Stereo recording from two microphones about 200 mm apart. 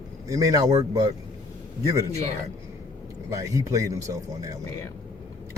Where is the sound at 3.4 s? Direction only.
15° right (ahead or behind).